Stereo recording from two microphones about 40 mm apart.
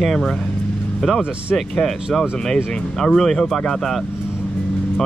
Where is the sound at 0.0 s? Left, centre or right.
Centre.